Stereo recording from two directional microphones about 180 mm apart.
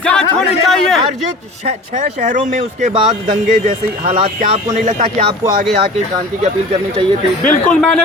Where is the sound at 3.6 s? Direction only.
50° right (ahead or behind).